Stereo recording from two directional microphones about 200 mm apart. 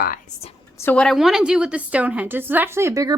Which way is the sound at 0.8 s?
10° left (ahead or behind).